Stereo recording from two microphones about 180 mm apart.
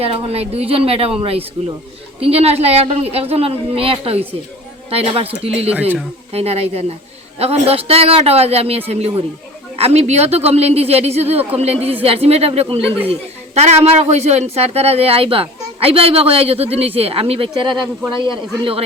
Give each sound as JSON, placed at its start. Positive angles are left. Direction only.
{"t": 0.0, "sound": "a woman's voice", "side_deg": -35}
{"t": 6.3, "sound": "a woman's voice", "side_deg": -35}